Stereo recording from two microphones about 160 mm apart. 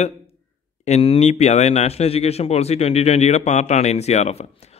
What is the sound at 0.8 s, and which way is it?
Speech, 40° left (ahead or behind).